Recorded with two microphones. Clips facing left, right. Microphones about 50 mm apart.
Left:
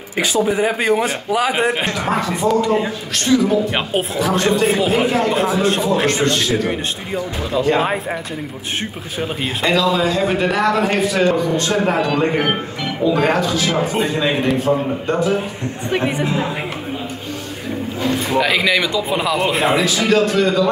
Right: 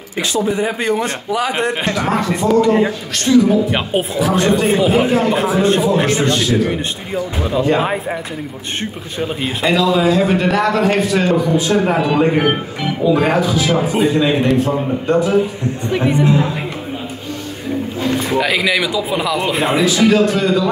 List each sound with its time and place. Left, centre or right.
0.5 s a man's voice: centre
1.9 s speech: centre
3.3 s speech: centre
9.2 s speech: centre
18.1 s speech: centre